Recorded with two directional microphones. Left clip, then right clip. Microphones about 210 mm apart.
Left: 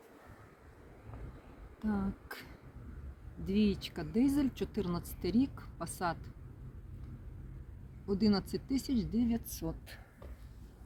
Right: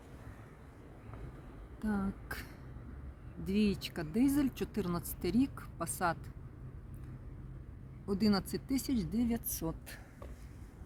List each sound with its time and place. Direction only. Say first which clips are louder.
1.8 s a sound: even; 30° right (ahead or behind)
3.4 s a woman's voice: left 1 dB; 30° right (ahead or behind)
8.0 s a woman's voice: left 1 dB; 40° right (ahead or behind)